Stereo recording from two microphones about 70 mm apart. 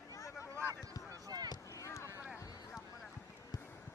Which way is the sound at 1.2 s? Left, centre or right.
Right.